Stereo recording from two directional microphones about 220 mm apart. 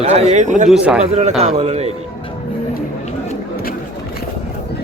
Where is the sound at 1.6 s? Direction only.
30° right (ahead or behind).